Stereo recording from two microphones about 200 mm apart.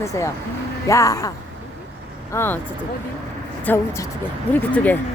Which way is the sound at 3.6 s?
10° left (ahead or behind).